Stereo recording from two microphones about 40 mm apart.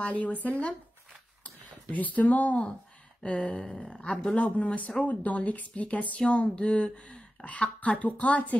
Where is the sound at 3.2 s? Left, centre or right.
Left.